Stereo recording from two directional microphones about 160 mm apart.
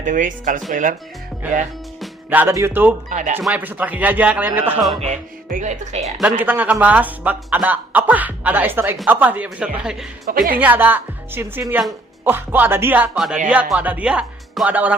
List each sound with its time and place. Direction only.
0.0 s a woman's voice: 55° right (ahead or behind)
2.3 s speech: 15° right (ahead or behind)
3.1 s speech: 50° right (ahead or behind)
3.4 s speech: 10° right (ahead or behind)
5.5 s speech: 55° right (ahead or behind)
6.1 s speech: 10° right (ahead or behind)
10.2 s a woman's voice: 65° right (ahead or behind)
10.6 s speech: 10° right (ahead or behind)